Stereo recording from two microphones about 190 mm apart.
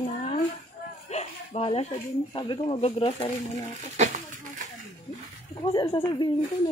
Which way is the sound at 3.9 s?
40° right (ahead or behind).